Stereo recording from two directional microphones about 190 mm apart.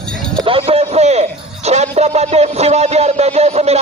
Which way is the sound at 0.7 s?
30° right (ahead or behind).